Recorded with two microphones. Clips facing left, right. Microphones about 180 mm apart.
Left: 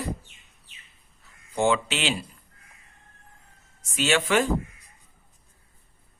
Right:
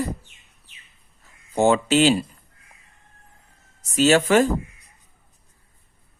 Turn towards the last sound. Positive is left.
turn(degrees=-40)  # may be behind; listen again after turning